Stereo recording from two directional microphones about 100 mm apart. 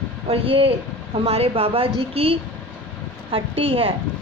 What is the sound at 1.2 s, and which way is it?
Speech, 85° right.